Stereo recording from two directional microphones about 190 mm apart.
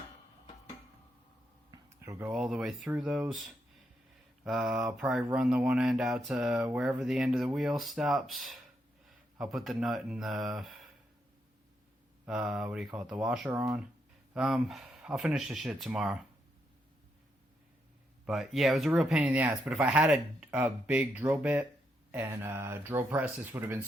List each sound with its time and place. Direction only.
1.7 s speech: 15° right (ahead or behind)
4.4 s speech: 5° right (ahead or behind)
12.2 s speech: 5° right (ahead or behind)
13.5 s speech: 15° right (ahead or behind)
14.3 s speech: 5° right (ahead or behind)
18.3 s speech: centre (ahead or behind)